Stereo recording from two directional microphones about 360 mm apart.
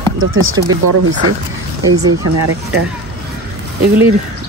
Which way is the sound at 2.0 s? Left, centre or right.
Right.